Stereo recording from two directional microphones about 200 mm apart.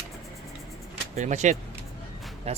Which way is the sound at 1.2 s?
35° right (ahead or behind).